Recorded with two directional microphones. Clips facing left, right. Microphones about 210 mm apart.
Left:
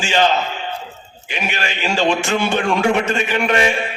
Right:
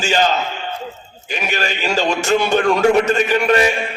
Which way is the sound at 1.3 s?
40° right (ahead or behind).